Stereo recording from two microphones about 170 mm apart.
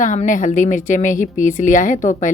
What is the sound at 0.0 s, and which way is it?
A woman's voice, 50° left (ahead or behind).